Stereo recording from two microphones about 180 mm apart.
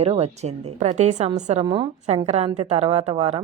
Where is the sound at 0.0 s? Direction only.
35° right (ahead or behind).